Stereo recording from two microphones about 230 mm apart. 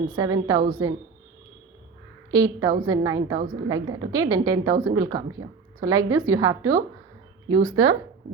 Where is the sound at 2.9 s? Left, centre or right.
Centre.